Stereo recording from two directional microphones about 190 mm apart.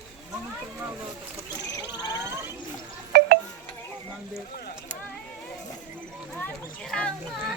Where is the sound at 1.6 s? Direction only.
20° left (ahead or behind).